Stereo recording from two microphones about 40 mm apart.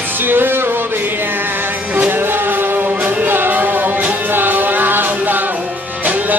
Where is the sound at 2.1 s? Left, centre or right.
Right.